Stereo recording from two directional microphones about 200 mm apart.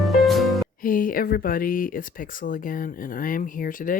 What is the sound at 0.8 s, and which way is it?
Speech, 45° left (ahead or behind).